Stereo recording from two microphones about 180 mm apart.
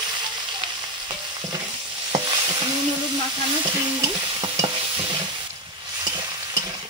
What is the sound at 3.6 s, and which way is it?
Stir, 25° right (ahead or behind).